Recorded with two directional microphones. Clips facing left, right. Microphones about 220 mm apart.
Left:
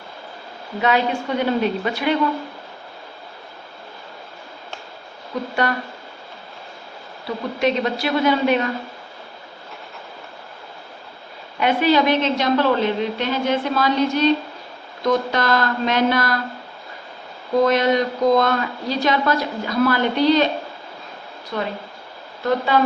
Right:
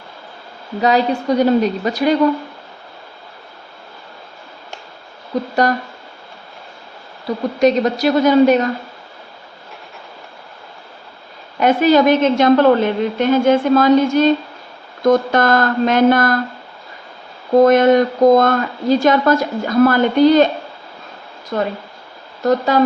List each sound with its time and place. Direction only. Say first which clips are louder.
0.8 s a woman's voice: right 4 dB; 40° right (ahead or behind)
5.6 s a woman's voice: right 6 dB; 40° right (ahead or behind)
7.6 s a woman's voice: right 7 dB; 40° right (ahead or behind)
11.6 s a woman's voice: right 5 dB; 45° right (ahead or behind)
17.6 s a woman's voice: right 7 dB; 50° right (ahead or behind)
21.5 s a woman's voice: right 5 dB; 45° right (ahead or behind)